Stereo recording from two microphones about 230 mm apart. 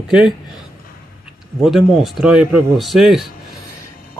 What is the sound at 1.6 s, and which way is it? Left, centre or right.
Speech, centre.